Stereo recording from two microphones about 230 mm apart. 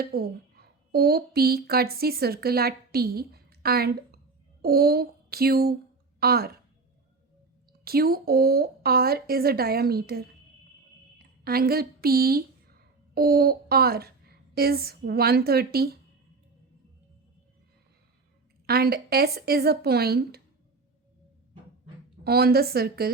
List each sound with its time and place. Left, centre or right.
0.0 s a woman's voice: right
4.6 s a sound: right
6.1 s a woman's voice: right
7.9 s a woman's voice: right
18.6 s speech: right
22.2 s speech: right